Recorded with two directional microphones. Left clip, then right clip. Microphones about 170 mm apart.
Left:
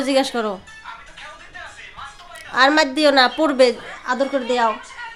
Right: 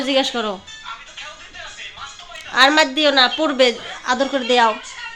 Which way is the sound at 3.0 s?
20° left (ahead or behind).